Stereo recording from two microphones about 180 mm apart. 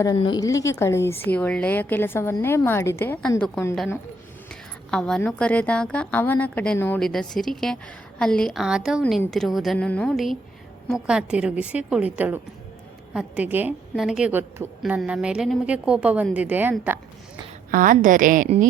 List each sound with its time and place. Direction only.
0.0 s a woman's voice: 20° left (ahead or behind); by 16.7 s 10° right (ahead or behind)
17.7 s a woman's voice: 50° right (ahead or behind)